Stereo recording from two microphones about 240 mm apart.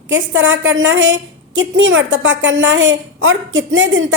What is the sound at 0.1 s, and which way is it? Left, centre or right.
A woman's voice, right.